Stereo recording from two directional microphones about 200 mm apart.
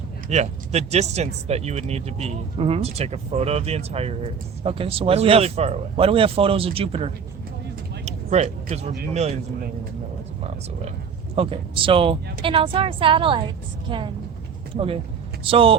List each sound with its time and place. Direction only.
0.3 s speech: 35° right (ahead or behind)
8.0 s vehicle: 35° right (ahead or behind)
9.1 s speech: 35° right (ahead or behind)
11.3 s speech: 25° right (ahead or behind)